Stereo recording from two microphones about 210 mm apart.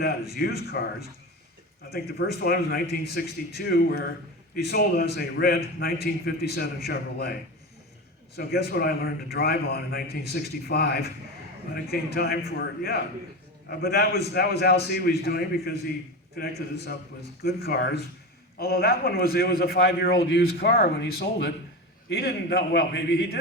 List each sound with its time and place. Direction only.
0.0 s a man's voice: 50° left (ahead or behind)
8.4 s a man's voice: 45° left (ahead or behind)